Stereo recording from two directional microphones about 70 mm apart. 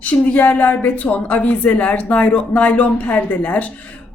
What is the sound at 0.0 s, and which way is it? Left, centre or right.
A woman's voice, left.